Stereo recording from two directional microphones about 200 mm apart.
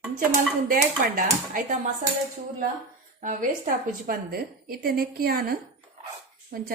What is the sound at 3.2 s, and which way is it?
A woman's voice, 45° right (ahead or behind).